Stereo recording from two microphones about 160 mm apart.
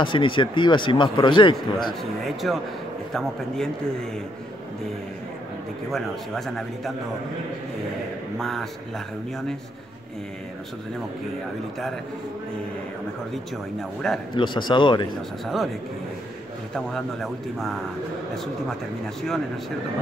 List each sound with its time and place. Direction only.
0.0 s speech: 30° left (ahead or behind)
2.2 s a man's voice: centre (ahead or behind)
5.9 s a man's voice: centre (ahead or behind)
8.4 s a man's voice: centre (ahead or behind)
13.3 s a man's voice: centre (ahead or behind)
14.3 s speech: 30° left (ahead or behind)
15.4 s a man's voice: centre (ahead or behind)
16.7 s a man's voice: centre (ahead or behind)